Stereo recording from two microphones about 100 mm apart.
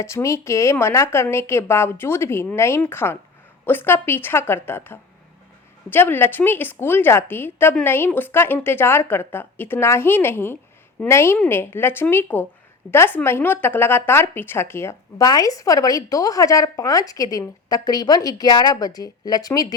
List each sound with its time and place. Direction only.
0.0 s a woman's voice: 30° left (ahead or behind)
15.2 s speech: 40° left (ahead or behind)